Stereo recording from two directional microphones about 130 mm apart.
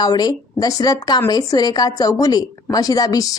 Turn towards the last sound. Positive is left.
turn(degrees=30)  # may be behind; listen again after turning